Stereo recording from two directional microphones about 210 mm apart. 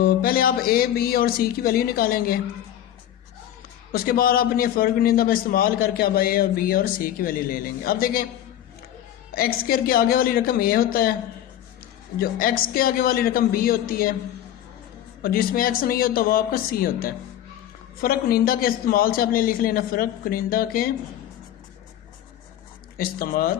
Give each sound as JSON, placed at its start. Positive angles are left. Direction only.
{"t": 0.0, "sound": "a man's voice", "side_deg": 45}
{"t": 3.9, "sound": "a man's voice", "side_deg": 45}
{"t": 9.3, "sound": "a man's voice", "side_deg": 45}
{"t": 12.2, "sound": "a man's voice", "side_deg": 45}
{"t": 15.2, "sound": "a man's voice", "side_deg": 45}
{"t": 23.0, "sound": "a man's voice", "side_deg": 45}